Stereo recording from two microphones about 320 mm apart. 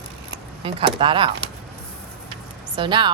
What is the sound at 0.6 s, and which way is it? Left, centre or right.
Speech, centre.